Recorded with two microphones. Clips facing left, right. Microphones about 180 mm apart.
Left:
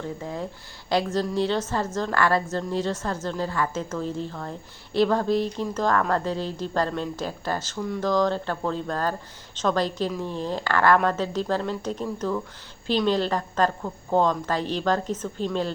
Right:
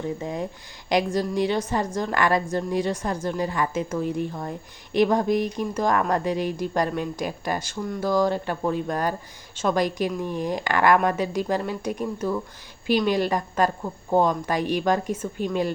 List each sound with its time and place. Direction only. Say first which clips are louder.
0.0 s a woman's voice: right 3 dB; 15° right (ahead or behind)